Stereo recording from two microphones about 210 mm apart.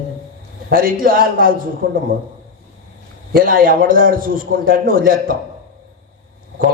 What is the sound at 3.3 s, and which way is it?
A man's voice, 45° right (ahead or behind).